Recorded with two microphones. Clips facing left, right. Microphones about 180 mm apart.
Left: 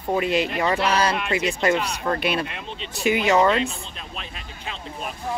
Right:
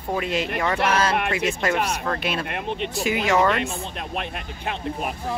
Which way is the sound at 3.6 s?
60° right (ahead or behind).